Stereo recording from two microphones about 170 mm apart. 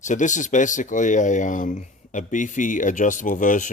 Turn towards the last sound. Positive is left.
turn(degrees=50)  # may be behind; listen again after turning